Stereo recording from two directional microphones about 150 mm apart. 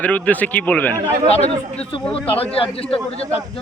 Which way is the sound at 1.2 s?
45° left (ahead or behind).